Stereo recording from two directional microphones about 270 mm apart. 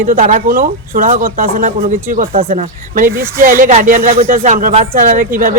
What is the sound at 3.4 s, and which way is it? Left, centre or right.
A man's voice, right.